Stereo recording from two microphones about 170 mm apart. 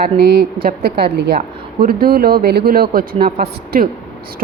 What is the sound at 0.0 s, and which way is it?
Speech, 70° right (ahead or behind).